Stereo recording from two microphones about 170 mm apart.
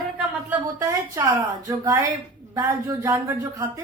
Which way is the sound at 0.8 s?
20° right (ahead or behind).